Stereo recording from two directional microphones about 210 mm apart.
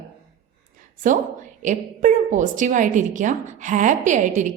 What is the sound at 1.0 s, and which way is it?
A woman's voice, 40° right (ahead or behind).